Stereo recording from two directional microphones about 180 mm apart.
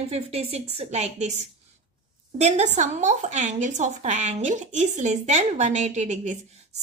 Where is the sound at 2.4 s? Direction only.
40° right (ahead or behind).